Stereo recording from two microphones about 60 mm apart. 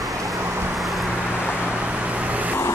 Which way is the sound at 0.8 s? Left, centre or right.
Centre.